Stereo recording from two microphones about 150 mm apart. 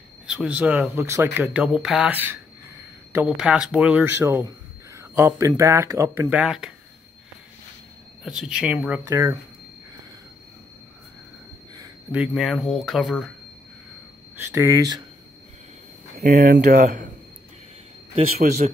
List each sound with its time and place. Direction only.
0.3 s speech: 5° right (ahead or behind)
4.9 s a sound: 20° right (ahead or behind)
5.6 s speech: 20° right (ahead or behind)
6.3 s speech: 5° right (ahead or behind)
8.3 s speech: 5° right (ahead or behind)
12.4 s speech: centre (ahead or behind)
14.4 s speech: 15° right (ahead or behind)
16.2 s speech: 75° right (ahead or behind)
18.4 s speech: 65° right (ahead or behind)